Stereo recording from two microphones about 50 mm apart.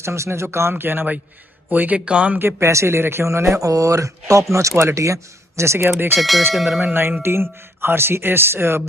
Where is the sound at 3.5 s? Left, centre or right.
Right.